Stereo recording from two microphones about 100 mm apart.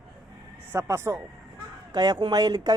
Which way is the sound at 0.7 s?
25° right (ahead or behind).